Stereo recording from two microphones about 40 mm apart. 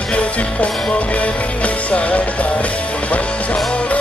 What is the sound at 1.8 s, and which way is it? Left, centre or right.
Music, left.